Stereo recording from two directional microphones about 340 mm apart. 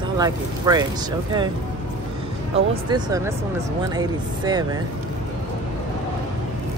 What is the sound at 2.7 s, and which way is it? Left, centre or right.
Speech, centre.